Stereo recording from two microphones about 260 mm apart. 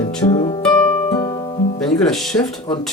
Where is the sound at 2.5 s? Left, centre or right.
Centre.